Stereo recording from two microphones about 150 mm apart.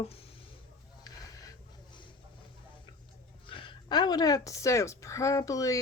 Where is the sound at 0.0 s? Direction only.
40° left (ahead or behind).